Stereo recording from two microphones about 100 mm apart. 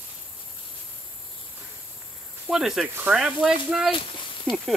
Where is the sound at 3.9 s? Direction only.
60° left (ahead or behind).